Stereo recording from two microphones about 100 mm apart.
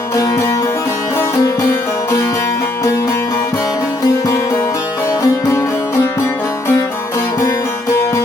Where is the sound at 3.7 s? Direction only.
35° left (ahead or behind).